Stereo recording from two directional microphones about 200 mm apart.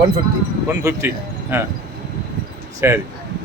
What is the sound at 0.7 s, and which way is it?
Speech, 10° right (ahead or behind).